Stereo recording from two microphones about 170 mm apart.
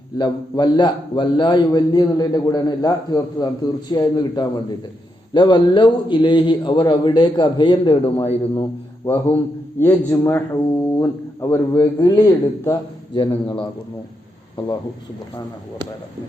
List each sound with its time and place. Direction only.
0.2 s a man's voice: 25° left (ahead or behind)
9.0 s a man's voice: 10° left (ahead or behind); by 13.7 s 25° left (ahead or behind)